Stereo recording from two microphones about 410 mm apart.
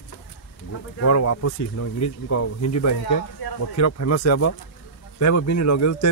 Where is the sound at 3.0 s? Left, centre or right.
Left.